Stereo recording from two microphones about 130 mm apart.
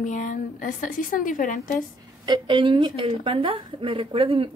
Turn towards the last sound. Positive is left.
turn(degrees=-45)  # may be behind; listen again after turning